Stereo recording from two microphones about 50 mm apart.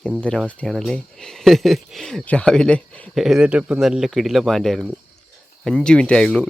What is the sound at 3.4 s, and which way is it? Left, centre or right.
Speech, right.